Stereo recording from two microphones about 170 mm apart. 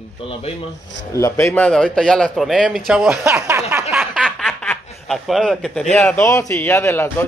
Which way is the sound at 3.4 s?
15° right (ahead or behind).